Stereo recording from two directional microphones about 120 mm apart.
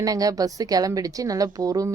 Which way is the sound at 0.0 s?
30° right (ahead or behind).